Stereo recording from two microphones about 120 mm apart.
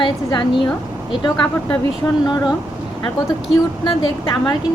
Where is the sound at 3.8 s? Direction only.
45° left (ahead or behind).